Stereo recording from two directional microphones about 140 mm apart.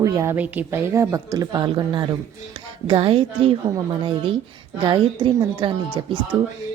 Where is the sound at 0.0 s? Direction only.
20° right (ahead or behind).